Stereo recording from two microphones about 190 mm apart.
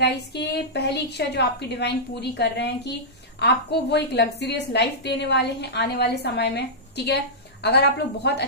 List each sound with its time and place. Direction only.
0.0 s a woman's voice: 65° left (ahead or behind)
7.6 s a woman's voice: 60° left (ahead or behind)